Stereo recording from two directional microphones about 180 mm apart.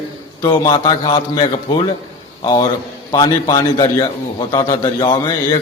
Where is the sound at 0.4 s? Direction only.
25° left (ahead or behind).